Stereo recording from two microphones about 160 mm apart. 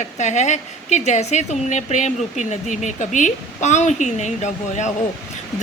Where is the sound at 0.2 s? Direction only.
45° left (ahead or behind).